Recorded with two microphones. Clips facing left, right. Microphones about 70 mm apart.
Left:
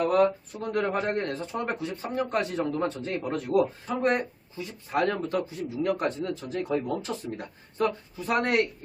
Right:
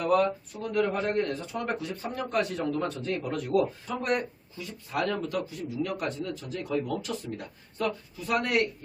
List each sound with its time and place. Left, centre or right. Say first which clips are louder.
0.0 s speech: left 2 dB; left